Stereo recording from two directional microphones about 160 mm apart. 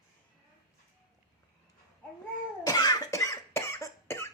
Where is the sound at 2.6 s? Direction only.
25° left (ahead or behind).